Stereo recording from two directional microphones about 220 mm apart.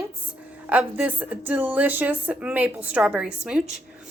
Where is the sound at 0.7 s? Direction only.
5° right (ahead or behind).